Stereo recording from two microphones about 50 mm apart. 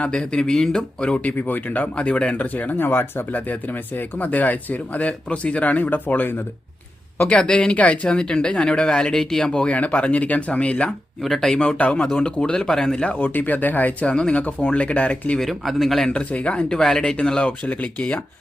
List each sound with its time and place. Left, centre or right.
0.0 s speech: centre
1.3 s speech: left
2.5 s speech: left
3.3 s speech: left
7.3 s speech: left
9.7 s speech: left
11.2 s speech: centre
11.8 s speech: left
13.1 s speech: left
14.1 s speech: left
15.4 s speech: centre
16.0 s speech: left